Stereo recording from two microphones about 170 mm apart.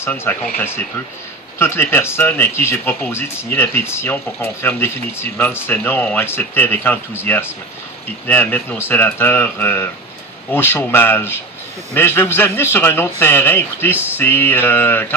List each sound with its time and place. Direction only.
0.0 s speech: 15° left (ahead or behind)
1.6 s speech: 15° left (ahead or behind)